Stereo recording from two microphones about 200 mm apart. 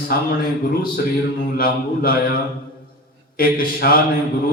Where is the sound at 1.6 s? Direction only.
45° left (ahead or behind).